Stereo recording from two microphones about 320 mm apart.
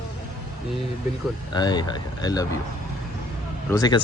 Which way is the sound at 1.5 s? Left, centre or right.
Centre.